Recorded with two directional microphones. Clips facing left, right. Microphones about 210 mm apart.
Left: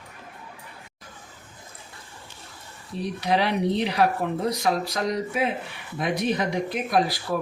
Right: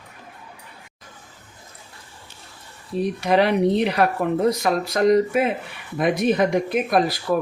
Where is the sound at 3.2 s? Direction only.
55° right (ahead or behind).